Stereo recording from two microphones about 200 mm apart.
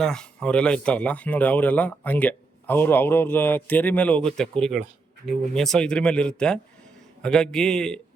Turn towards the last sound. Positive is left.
turn(degrees=5)  # may be behind; listen again after turning